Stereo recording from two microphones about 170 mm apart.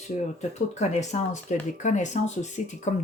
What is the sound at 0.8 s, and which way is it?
Speech, 45° left (ahead or behind).